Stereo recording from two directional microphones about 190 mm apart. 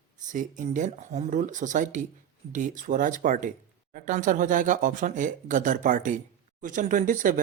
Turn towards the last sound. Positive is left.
turn(degrees=-45)  # may be behind; listen again after turning